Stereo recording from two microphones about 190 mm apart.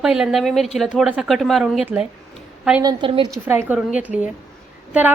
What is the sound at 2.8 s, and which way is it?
Speech, 25° right (ahead or behind).